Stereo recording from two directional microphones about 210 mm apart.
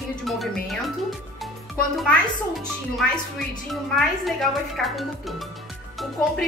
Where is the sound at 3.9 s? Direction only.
Centre (ahead or behind).